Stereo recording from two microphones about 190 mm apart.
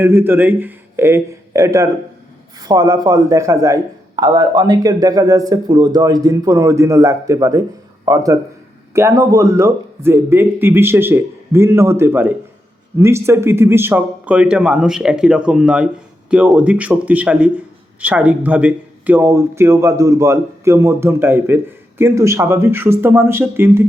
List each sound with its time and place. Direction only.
0.0 s a man's voice: 10° right (ahead or behind)